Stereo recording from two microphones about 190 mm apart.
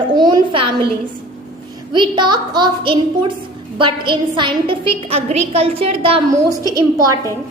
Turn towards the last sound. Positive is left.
turn(degrees=-20)  # may be behind; listen again after turning